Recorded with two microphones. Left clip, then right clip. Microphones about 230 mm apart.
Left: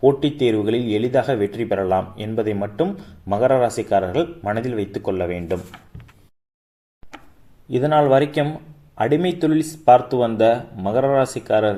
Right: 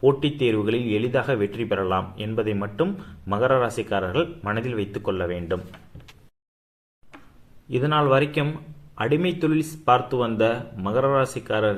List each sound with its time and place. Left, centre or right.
0.2 s speech: centre
7.1 s a sound: centre
7.7 s speech: centre